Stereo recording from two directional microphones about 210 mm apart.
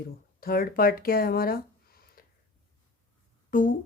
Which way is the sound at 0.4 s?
45° left (ahead or behind).